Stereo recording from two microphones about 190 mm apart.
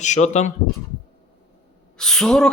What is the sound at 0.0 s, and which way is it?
Speech, 40° left (ahead or behind).